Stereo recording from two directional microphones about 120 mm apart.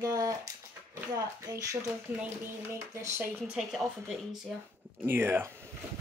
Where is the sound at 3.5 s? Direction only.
Centre (ahead or behind).